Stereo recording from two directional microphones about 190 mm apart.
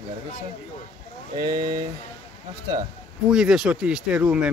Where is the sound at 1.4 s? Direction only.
25° right (ahead or behind).